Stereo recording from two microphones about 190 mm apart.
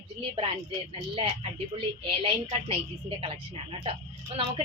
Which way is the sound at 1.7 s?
25° right (ahead or behind).